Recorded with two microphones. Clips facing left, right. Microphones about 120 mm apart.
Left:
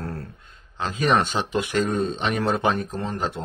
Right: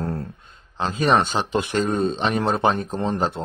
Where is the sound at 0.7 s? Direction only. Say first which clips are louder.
Right 2 dB; 35° right (ahead or behind).